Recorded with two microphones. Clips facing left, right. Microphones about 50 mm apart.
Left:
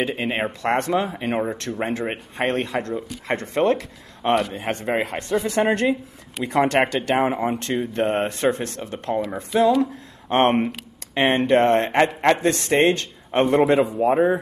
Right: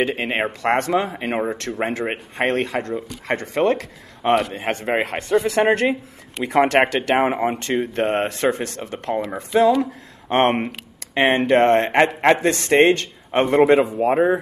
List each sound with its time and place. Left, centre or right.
0.0 s speech: centre
0.7 s speech: centre
7.5 s speech: centre